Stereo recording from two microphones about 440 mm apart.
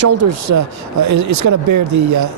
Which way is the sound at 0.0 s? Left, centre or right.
Right.